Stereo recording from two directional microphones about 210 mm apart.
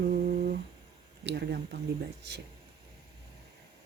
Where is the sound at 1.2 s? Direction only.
55° right (ahead or behind).